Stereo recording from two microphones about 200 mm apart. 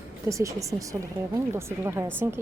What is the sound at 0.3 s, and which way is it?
A woman's voice, 15° right (ahead or behind).